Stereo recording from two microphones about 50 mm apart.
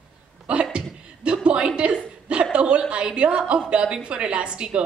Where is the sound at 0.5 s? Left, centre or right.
Right.